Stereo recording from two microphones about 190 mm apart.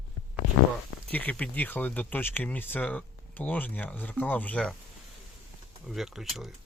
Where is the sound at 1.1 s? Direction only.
10° left (ahead or behind).